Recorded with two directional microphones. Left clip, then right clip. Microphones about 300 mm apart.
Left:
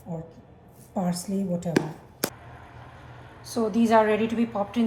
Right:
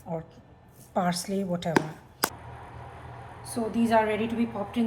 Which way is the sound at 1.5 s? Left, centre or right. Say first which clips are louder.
Even; centre.